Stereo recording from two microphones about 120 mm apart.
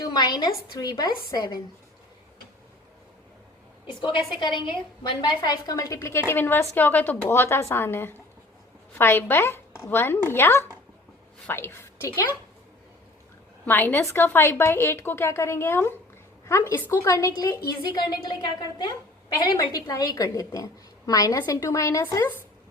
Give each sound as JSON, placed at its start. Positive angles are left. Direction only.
{"t": 0.0, "sound": "a woman's voice", "side_deg": 35}
{"t": 3.8, "sound": "a woman's voice", "side_deg": 40}
{"t": 13.7, "sound": "a woman's voice", "side_deg": 15}
{"t": 19.7, "sound": "a woman's voice", "side_deg": 30}